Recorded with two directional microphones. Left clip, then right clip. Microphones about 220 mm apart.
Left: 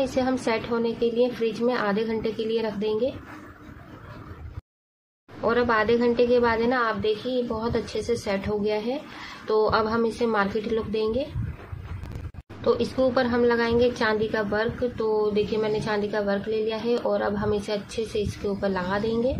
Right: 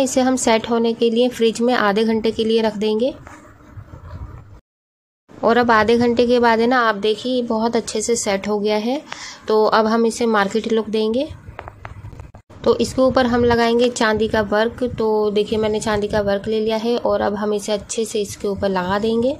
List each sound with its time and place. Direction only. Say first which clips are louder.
0.0 s a woman's voice: right 7 dB; 25° right (ahead or behind)
5.4 s a woman's voice: right 8 dB; 25° right (ahead or behind)
12.6 s a woman's voice: right 7 dB; 20° right (ahead or behind)